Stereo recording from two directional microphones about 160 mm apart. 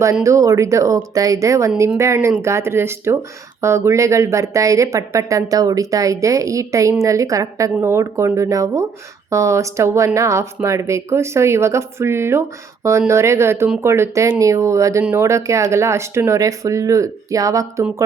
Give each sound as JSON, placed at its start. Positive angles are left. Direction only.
{"t": 0.0, "sound": "a woman's voice", "side_deg": -20}